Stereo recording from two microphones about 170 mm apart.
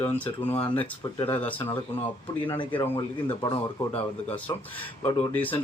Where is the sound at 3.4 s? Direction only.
35° left (ahead or behind).